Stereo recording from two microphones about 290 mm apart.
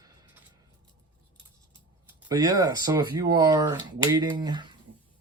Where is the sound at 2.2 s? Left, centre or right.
Centre.